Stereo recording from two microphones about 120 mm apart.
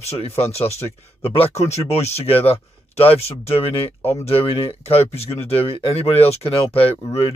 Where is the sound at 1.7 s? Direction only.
65° left (ahead or behind).